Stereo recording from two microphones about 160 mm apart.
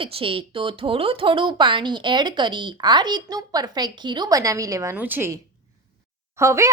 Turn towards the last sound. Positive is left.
turn(degrees=-20)  # may be behind; listen again after turning